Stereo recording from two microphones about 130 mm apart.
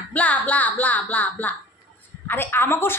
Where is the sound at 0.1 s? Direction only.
10° left (ahead or behind).